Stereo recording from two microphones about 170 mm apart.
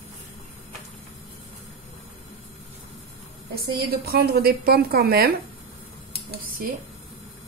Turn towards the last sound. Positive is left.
turn(degrees=-60)  # may be behind; listen again after turning